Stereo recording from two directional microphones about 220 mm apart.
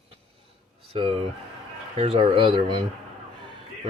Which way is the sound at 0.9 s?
25° right (ahead or behind).